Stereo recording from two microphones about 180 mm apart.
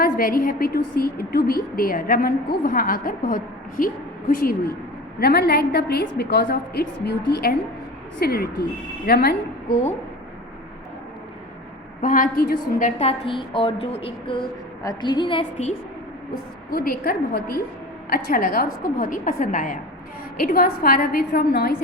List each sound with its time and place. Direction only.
0.0 s a woman's voice: 55° left (ahead or behind)
12.0 s a woman's voice: 45° left (ahead or behind)
13.0 s a woman's voice: 30° left (ahead or behind)
16.7 s a woman's voice: 55° left (ahead or behind)